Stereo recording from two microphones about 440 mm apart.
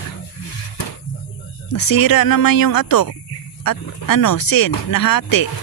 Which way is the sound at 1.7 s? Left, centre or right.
Left.